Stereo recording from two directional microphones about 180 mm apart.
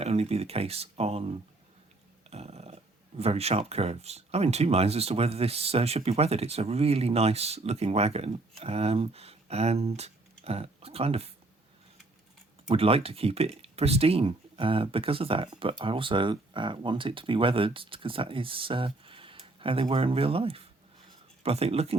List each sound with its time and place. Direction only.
0.0 s speech: 35° right (ahead or behind)
12.6 s speech: 30° right (ahead or behind)